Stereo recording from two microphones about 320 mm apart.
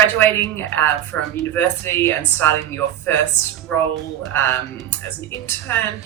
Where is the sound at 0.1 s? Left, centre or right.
Centre.